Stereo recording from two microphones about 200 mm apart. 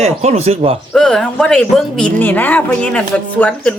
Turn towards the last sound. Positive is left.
turn(degrees=5)  # may be behind; listen again after turning